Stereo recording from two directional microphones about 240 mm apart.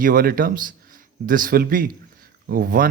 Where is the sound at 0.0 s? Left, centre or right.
Right.